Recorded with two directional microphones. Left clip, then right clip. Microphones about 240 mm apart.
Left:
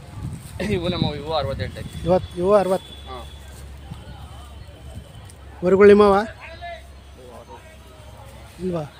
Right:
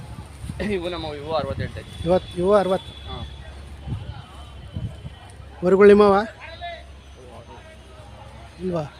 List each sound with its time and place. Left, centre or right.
0.5 s speech: left
2.0 s speech: centre
3.1 s vehicle: left
5.6 s speech: centre